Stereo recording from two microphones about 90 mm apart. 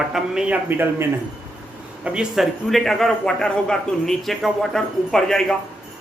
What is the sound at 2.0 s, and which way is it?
A man's voice, 5° right (ahead or behind).